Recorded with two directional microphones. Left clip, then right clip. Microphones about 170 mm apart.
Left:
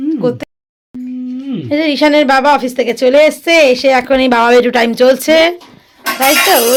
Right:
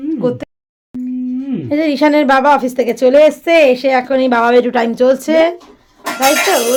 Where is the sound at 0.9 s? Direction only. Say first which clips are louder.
Right 2 dB; centre (ahead or behind).